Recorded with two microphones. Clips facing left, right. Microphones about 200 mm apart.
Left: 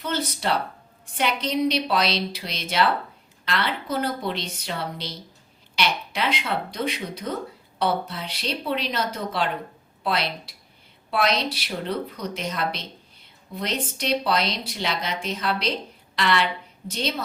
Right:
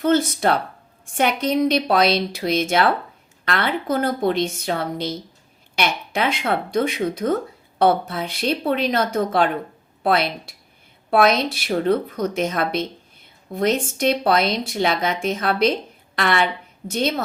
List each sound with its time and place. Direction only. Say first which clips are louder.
0.0 s speech: right 9 dB; 50° right (ahead or behind)